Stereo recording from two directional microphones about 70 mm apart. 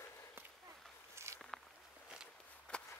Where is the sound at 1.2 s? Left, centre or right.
Right.